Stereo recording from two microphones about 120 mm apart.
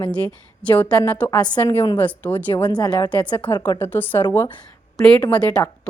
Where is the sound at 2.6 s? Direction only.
35° left (ahead or behind).